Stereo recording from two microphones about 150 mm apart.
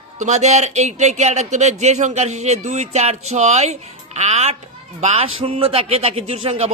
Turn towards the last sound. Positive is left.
turn(degrees=-45)  # may be behind; listen again after turning